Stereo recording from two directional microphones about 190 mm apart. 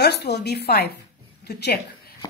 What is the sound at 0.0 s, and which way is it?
Speech, 60° left (ahead or behind).